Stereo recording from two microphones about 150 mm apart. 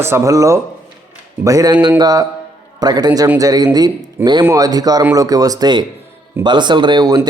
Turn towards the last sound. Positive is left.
turn(degrees=-25)  # may be behind; listen again after turning